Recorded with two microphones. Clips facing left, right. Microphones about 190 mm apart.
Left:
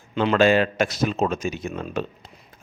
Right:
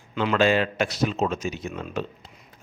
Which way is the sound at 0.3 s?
45° left (ahead or behind).